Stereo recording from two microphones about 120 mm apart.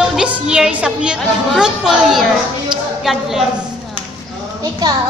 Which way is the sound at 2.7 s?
Centre (ahead or behind).